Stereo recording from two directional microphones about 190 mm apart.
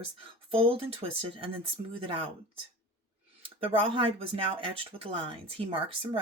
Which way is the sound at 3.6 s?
30° right (ahead or behind).